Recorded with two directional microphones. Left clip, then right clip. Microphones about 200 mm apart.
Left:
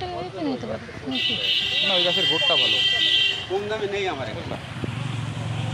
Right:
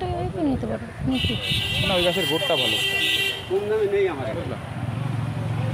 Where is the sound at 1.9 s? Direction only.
40° right (ahead or behind).